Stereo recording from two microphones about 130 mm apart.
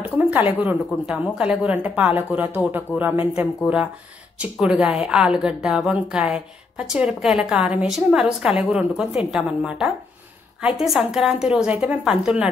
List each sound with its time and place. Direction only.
0.1 s a woman's voice: 10° right (ahead or behind)